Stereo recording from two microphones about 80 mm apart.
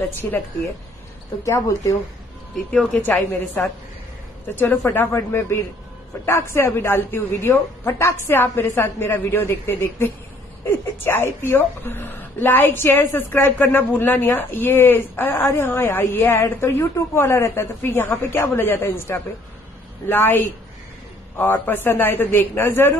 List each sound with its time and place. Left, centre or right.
0.2 s a man's voice: left
1.4 s a man's voice: left
2.5 s speech: centre
3.0 s a woman's voice: left
4.9 s a woman's voice: left